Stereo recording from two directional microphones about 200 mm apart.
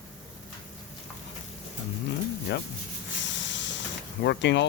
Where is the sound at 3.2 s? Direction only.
65° left (ahead or behind).